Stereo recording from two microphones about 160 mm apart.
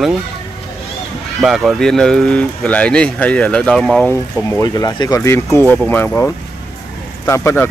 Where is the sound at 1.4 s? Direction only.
Centre (ahead or behind).